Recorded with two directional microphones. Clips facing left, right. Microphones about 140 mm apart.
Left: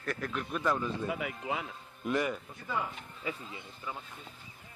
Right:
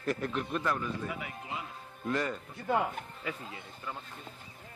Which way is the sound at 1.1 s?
90° left.